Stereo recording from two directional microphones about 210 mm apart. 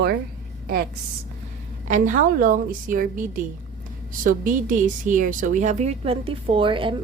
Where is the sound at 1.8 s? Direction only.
35° right (ahead or behind).